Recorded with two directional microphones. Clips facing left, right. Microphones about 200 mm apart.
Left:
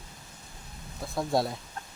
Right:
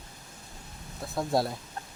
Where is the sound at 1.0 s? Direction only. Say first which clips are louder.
Even; centre (ahead or behind).